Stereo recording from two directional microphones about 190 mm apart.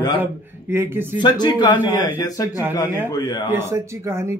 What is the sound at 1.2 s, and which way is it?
Speech, 20° left (ahead or behind).